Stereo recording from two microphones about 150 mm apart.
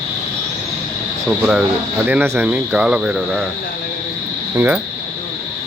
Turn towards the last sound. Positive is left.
turn(degrees=-15)  # may be behind; listen again after turning